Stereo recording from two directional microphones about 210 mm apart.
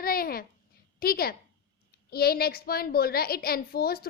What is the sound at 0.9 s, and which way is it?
A woman's voice, 45° left (ahead or behind).